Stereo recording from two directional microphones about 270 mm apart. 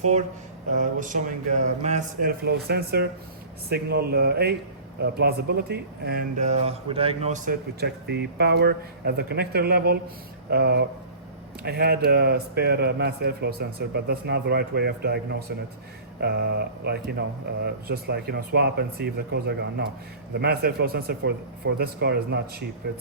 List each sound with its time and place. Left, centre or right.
0.7 s speech: right